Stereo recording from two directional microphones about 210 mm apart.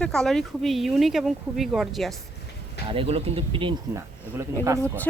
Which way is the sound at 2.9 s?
25° right (ahead or behind).